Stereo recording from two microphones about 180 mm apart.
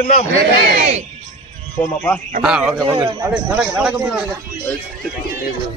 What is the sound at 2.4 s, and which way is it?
Speech, 5° right (ahead or behind).